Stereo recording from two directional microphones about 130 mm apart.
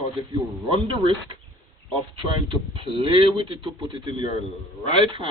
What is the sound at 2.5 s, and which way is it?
Speech, 40° right (ahead or behind).